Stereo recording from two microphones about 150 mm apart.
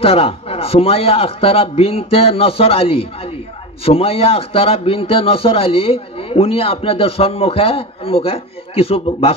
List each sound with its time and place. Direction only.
0.0 s a man's voice: 40° left (ahead or behind)